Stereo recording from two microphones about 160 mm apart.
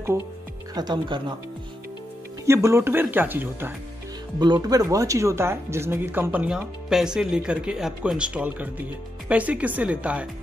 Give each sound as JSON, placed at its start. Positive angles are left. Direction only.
{"t": 0.7, "sound": "speech", "side_deg": -30}
{"t": 2.4, "sound": "speech", "side_deg": -15}
{"t": 4.4, "sound": "speech", "side_deg": -25}